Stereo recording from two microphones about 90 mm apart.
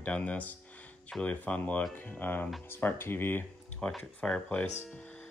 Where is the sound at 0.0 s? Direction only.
15° left (ahead or behind).